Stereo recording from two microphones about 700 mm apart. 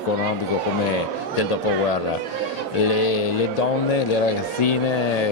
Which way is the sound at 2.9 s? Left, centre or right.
Left.